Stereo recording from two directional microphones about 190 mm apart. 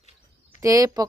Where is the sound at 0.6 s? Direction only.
15° right (ahead or behind).